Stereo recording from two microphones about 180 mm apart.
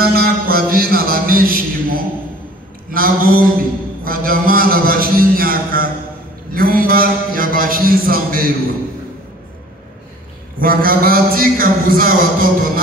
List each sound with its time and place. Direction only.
0.0 s music: 60° right (ahead or behind)
2.9 s a sound: 55° right (ahead or behind)
10.6 s a man's voice: 50° right (ahead or behind)